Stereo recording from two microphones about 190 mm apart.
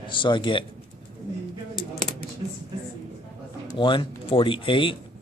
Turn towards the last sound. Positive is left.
turn(degrees=25)  # may be behind; listen again after turning